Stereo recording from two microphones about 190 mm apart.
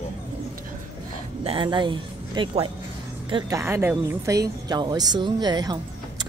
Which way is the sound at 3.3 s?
15° right (ahead or behind).